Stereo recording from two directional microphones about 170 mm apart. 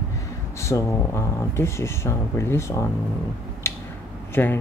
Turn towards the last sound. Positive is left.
turn(degrees=10)  # may be behind; listen again after turning